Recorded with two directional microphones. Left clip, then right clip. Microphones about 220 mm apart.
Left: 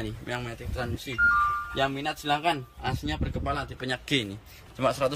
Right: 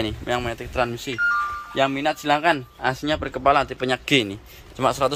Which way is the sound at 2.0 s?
45° right (ahead or behind).